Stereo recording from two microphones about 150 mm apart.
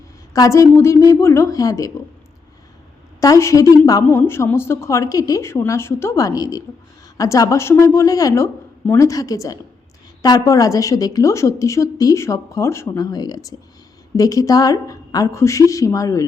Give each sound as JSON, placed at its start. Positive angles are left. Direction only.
{"t": 0.3, "sound": "a woman's voice", "side_deg": 20}
{"t": 3.2, "sound": "a woman's voice", "side_deg": 20}